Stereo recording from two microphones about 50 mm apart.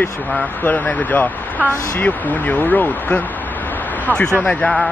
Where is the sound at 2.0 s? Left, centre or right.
Left.